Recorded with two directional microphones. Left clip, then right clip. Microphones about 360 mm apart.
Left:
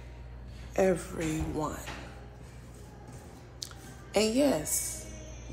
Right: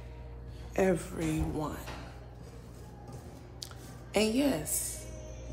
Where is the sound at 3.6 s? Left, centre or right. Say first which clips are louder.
Left 3 dB; centre.